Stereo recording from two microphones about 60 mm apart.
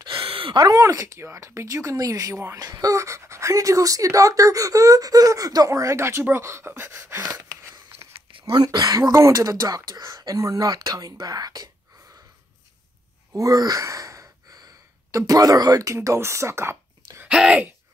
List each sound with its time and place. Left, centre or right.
0.7 s speech: right
2.3 s a sound: right
2.6 s speech: right
6.8 s a sound: right
8.6 s speech: right
13.4 s speech: right
17.3 s speech: centre